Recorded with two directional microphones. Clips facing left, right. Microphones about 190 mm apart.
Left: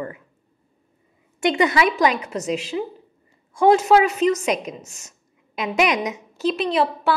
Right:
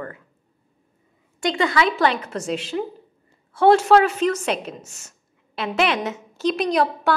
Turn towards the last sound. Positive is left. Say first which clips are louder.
# even
turn(degrees=0)  # may be behind; listen again after turning